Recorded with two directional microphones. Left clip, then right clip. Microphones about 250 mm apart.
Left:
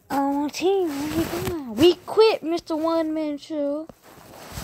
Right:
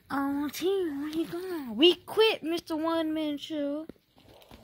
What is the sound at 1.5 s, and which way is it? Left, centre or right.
Speech, centre.